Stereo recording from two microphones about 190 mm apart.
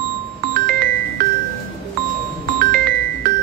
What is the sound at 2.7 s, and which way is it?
Music, 50° right (ahead or behind).